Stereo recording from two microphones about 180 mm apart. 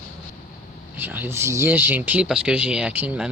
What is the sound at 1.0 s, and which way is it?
Speech, 10° right (ahead or behind).